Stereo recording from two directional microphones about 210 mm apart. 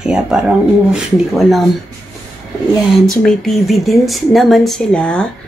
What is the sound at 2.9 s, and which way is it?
Speech, centre (ahead or behind).